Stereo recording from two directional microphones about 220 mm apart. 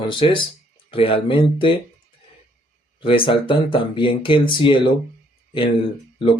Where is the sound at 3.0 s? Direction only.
25° left (ahead or behind).